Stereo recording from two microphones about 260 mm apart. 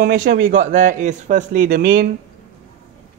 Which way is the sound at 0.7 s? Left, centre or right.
Right.